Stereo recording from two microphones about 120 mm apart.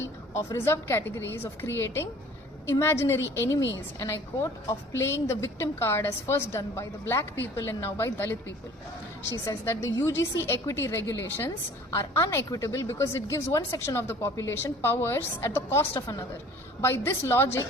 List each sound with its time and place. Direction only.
0.3 s a woman's voice: 20° left (ahead or behind)
4.7 s a woman's voice: 25° left (ahead or behind)
9.5 s a woman's voice: 20° left (ahead or behind)